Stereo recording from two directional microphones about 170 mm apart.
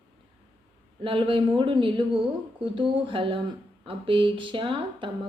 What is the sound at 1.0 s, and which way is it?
Speech, 30° right (ahead or behind).